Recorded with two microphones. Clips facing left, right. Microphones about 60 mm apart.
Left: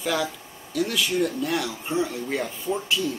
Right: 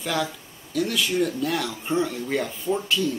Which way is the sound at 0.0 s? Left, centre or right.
Centre.